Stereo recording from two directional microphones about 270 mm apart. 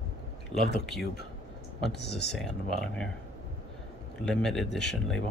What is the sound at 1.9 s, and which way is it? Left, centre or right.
Speech, left.